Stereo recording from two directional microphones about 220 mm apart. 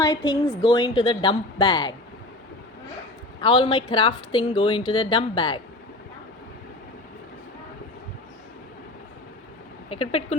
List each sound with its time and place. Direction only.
0.0 s a woman's voice: 20° left (ahead or behind)
3.4 s speech: 20° left (ahead or behind)
9.9 s speech: 25° left (ahead or behind)